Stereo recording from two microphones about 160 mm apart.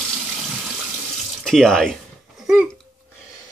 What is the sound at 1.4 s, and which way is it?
Speech, centre (ahead or behind).